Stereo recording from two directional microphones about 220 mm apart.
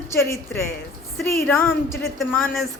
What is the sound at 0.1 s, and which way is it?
Speech, 10° left (ahead or behind).